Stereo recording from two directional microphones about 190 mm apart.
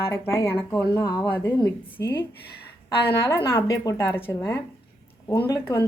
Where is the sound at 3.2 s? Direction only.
15° left (ahead or behind).